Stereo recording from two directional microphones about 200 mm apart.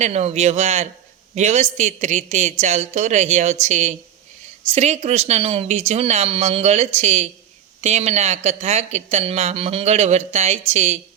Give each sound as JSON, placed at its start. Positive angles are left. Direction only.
{"t": 0.0, "sound": "speech", "side_deg": -35}